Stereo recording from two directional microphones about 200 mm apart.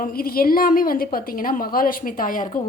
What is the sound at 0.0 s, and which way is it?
A woman's voice, 45° left (ahead or behind).